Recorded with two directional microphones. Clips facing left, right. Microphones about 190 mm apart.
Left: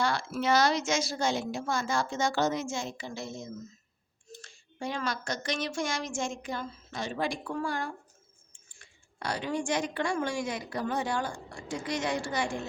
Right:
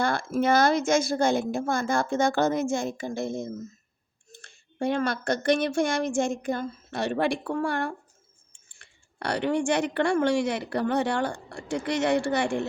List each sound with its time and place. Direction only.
0.0 s a woman's voice: 55° right (ahead or behind)